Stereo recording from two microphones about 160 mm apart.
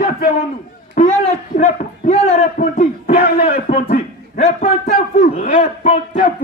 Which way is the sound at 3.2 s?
70° left (ahead or behind).